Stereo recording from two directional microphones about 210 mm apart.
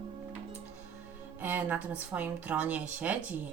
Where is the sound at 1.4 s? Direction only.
10° right (ahead or behind).